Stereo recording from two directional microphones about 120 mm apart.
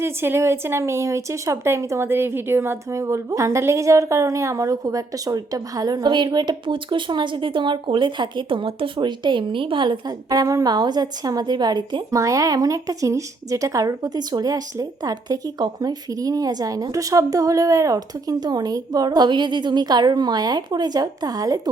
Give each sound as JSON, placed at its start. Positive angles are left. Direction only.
{"t": 0.0, "sound": "speech", "side_deg": -20}